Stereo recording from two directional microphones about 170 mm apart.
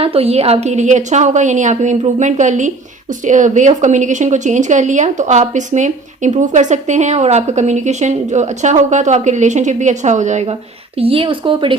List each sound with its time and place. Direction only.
0.0 s speech: 35° right (ahead or behind)
10.9 s speech: 35° right (ahead or behind)